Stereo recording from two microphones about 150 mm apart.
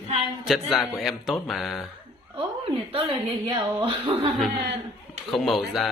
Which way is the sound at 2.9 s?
40° right (ahead or behind).